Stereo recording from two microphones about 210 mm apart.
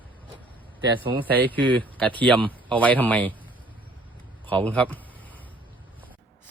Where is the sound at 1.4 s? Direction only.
5° left (ahead or behind).